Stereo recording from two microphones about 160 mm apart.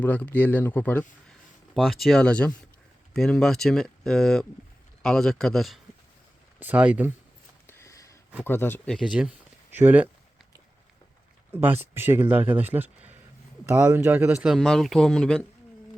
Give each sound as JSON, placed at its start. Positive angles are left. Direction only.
{"t": 0.0, "sound": "speech", "side_deg": 10}
{"t": 1.7, "sound": "speech", "side_deg": 0}
{"t": 6.6, "sound": "speech", "side_deg": -10}
{"t": 7.7, "sound": "sniff", "side_deg": 15}
{"t": 8.4, "sound": "speech", "side_deg": 15}
{"t": 8.9, "sound": "speech", "side_deg": 0}
{"t": 11.5, "sound": "speech", "side_deg": -10}